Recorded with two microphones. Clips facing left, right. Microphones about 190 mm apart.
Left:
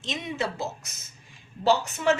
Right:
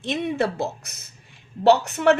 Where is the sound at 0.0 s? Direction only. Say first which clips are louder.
Right 7 dB; 55° right (ahead or behind).